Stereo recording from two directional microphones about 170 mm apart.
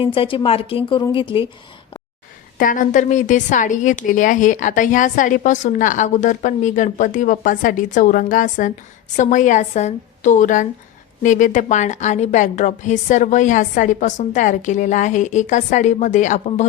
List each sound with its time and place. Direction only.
0.0 s speech: 30° left (ahead or behind)
2.6 s a woman's voice: 50° left (ahead or behind)